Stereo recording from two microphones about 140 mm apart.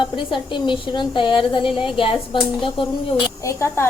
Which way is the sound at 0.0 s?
35° left (ahead or behind).